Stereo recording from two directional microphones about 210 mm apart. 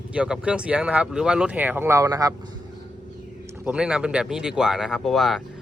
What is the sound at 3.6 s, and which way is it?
Speech, 5° right (ahead or behind).